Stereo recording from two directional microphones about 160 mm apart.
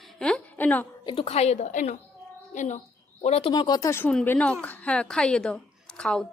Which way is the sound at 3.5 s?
25° left (ahead or behind).